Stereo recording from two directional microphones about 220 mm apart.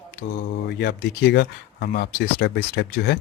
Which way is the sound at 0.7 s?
50° left (ahead or behind).